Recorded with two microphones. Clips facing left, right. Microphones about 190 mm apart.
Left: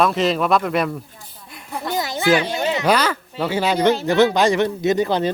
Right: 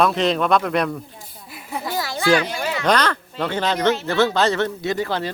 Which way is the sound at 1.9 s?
20° left (ahead or behind).